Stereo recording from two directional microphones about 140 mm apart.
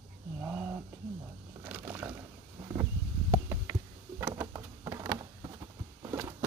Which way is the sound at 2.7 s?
25° right (ahead or behind).